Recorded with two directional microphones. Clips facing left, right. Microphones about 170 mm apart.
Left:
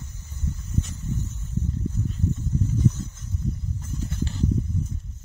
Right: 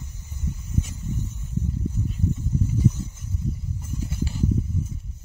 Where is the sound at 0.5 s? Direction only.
10° right (ahead or behind).